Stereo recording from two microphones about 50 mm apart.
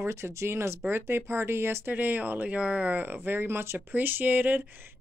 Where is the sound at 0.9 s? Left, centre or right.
Right.